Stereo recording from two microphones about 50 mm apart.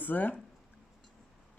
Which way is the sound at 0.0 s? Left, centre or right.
Left.